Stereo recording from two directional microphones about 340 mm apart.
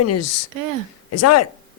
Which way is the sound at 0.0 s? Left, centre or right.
Left.